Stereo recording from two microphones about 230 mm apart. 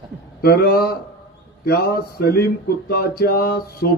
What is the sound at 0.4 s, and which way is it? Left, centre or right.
Speech, left.